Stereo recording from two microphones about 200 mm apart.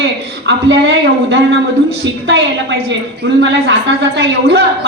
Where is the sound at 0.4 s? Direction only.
60° right (ahead or behind).